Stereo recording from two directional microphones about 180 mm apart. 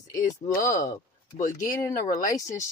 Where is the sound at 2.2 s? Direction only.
20° left (ahead or behind).